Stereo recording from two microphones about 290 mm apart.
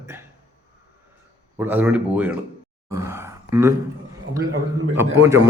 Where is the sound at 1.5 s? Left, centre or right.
Centre.